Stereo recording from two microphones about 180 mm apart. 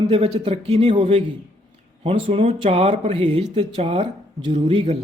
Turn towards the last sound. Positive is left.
turn(degrees=-30)  # may be behind; listen again after turning